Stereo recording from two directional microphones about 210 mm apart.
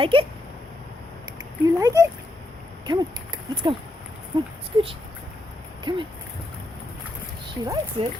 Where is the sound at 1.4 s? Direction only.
15° right (ahead or behind).